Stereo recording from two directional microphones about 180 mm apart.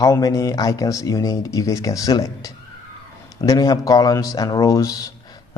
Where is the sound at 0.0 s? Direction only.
20° left (ahead or behind).